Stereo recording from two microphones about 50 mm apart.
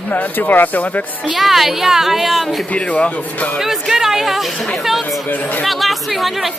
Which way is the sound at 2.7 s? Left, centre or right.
Left.